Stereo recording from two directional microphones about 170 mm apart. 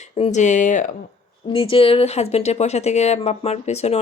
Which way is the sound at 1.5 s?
30° left (ahead or behind).